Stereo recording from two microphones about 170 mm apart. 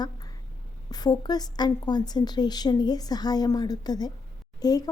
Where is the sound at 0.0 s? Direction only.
20° left (ahead or behind).